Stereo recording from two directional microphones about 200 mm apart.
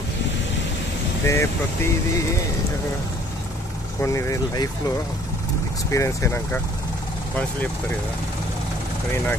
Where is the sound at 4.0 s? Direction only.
15° left (ahead or behind).